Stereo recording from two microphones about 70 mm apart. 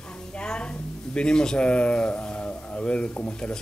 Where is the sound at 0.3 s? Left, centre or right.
Centre.